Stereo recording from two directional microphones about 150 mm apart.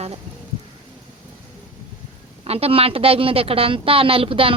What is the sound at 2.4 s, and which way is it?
A woman's voice, 40° right (ahead or behind).